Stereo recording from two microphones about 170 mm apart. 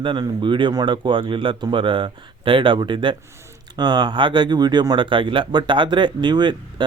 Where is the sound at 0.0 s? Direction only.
30° right (ahead or behind).